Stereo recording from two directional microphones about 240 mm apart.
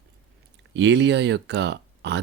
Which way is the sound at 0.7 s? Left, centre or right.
Right.